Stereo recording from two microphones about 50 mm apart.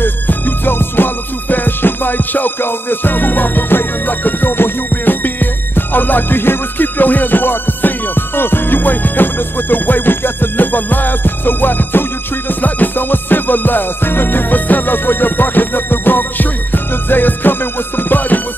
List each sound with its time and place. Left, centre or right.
0.0 s music: left